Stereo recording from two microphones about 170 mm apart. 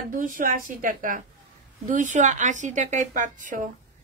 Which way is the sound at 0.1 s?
50° right (ahead or behind).